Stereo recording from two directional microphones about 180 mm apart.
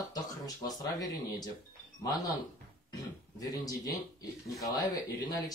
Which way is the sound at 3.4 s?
20° left (ahead or behind).